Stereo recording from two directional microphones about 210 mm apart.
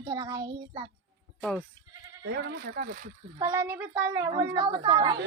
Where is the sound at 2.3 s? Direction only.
50° right (ahead or behind).